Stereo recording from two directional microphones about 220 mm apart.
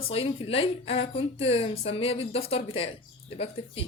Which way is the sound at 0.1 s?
25° left (ahead or behind).